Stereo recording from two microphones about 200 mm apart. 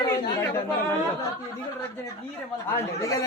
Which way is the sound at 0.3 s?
15° left (ahead or behind).